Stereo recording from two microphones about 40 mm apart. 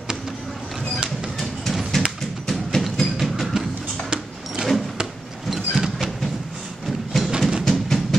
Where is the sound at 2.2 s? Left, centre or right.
Centre.